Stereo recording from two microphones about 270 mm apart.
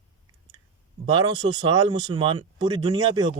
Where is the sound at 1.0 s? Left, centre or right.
Centre.